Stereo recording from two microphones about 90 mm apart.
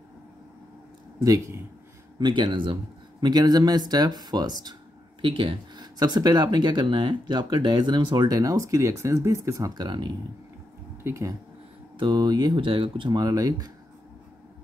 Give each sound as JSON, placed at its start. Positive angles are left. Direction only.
{"t": 1.2, "sound": "speech", "side_deg": -40}
{"t": 2.1, "sound": "speech", "side_deg": -55}
{"t": 5.2, "sound": "speech", "side_deg": -75}
{"t": 5.9, "sound": "speech", "side_deg": -50}
{"t": 8.3, "sound": "speech", "side_deg": -45}
{"t": 9.8, "sound": "speech", "side_deg": -55}
{"t": 11.1, "sound": "speech", "side_deg": -35}
{"t": 12.0, "sound": "speech", "side_deg": -50}
{"t": 12.5, "sound": "speech", "side_deg": -75}